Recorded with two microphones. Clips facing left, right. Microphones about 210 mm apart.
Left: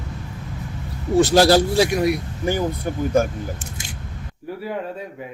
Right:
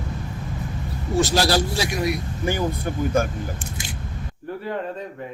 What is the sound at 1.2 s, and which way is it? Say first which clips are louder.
Speech: left 6 dB; 55° left (ahead or behind).